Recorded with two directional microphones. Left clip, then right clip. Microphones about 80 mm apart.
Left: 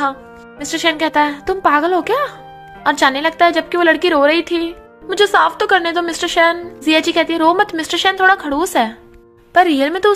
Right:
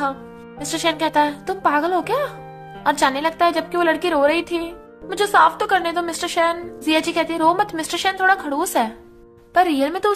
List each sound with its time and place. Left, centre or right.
0.0 s a woman's voice: left